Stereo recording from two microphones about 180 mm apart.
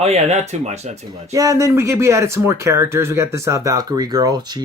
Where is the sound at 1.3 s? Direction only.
20° right (ahead or behind).